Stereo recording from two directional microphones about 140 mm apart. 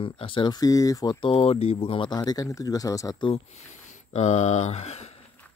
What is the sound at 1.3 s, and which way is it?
Speech, 45° left (ahead or behind).